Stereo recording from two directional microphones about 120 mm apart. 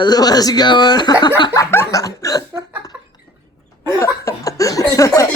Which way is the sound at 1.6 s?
25° left (ahead or behind).